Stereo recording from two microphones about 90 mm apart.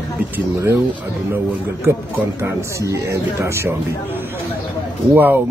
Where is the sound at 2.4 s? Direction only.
35° right (ahead or behind).